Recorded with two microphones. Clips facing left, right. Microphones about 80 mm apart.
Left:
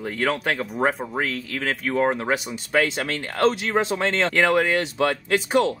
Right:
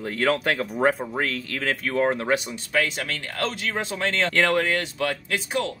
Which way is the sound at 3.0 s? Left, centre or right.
Left.